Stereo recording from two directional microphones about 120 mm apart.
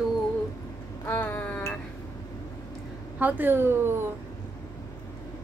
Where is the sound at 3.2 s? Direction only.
15° right (ahead or behind).